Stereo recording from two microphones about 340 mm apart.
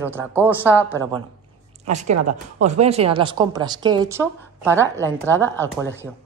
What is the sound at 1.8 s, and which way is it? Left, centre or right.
A woman's voice, right.